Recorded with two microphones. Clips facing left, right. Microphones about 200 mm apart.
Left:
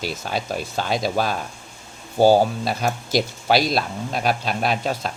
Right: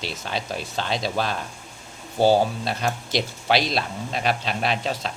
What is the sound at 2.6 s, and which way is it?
Speech, 5° left (ahead or behind).